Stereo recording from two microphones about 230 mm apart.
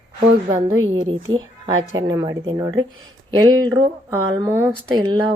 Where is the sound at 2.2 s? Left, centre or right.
Centre.